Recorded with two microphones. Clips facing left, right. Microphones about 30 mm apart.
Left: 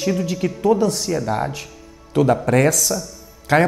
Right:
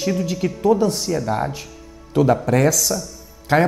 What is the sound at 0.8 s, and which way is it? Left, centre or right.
Speech, left.